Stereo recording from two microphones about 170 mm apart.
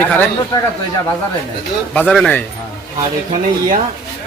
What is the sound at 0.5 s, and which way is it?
Speech, 25° left (ahead or behind).